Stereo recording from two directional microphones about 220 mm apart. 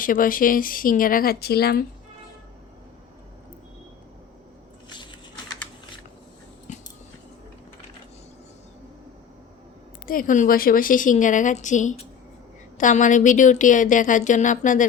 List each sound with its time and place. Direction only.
0.0 s a woman's voice: 40° left (ahead or behind)
6.7 s a sound: 30° left (ahead or behind)
10.1 s a woman's voice: 40° left (ahead or behind)